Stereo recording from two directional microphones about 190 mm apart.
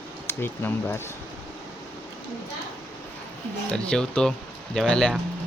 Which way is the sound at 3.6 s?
5° left (ahead or behind).